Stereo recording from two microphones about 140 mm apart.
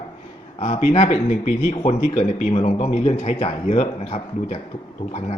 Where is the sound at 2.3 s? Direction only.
55° left (ahead or behind).